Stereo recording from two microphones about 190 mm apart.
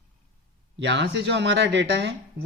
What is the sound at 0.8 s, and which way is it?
Speech, 65° right (ahead or behind).